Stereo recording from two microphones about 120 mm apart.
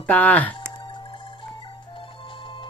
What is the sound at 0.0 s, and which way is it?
Speech, 10° left (ahead or behind).